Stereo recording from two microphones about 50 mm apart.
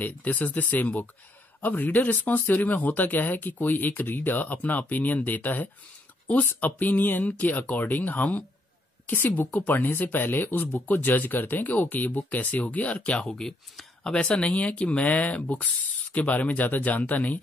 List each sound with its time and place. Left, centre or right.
0.0 s speech: left
13.4 s speech: centre
14.2 s speech: left